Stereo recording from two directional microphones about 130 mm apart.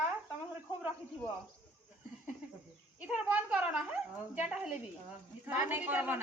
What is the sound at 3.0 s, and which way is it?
A woman's voice, 10° right (ahead or behind).